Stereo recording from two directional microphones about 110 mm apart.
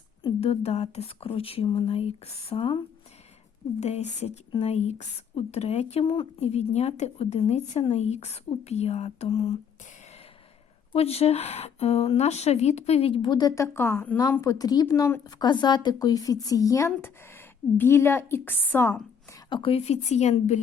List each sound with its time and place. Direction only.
0.3 s speech: 65° left (ahead or behind); by 2.8 s 50° left (ahead or behind)
3.8 s a woman's voice: 90° left; by 9.6 s 65° left (ahead or behind)
10.9 s speech: 65° left (ahead or behind)
13.2 s speech: 40° left (ahead or behind)
13.6 s a woman's voice: 20° left (ahead or behind)
14.4 s speech: 35° left (ahead or behind)
14.9 s a woman's voice: 25° left (ahead or behind)
15.2 s a woman's voice: 35° left (ahead or behind); by 18.9 s 20° left (ahead or behind)
19.5 s speech: 50° left (ahead or behind)
19.8 s a woman's voice: 85° left